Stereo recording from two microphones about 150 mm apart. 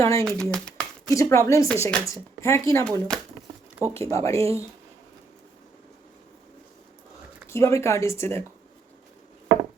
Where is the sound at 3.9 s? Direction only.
20° left (ahead or behind).